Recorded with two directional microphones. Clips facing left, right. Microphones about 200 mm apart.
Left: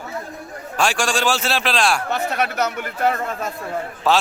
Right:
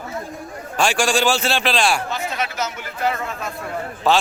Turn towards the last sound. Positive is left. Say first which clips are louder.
# right 1 dB
turn(degrees=5)  # may be behind; listen again after turning